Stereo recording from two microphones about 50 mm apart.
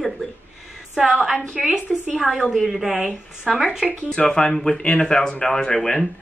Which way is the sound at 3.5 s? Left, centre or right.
Centre.